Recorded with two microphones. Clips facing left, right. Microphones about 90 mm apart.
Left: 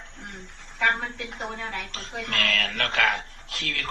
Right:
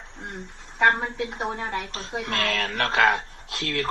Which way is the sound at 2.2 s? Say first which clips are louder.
Even; 30° right (ahead or behind).